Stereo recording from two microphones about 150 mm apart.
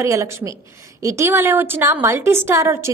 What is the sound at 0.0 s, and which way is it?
A woman's voice, 20° right (ahead or behind).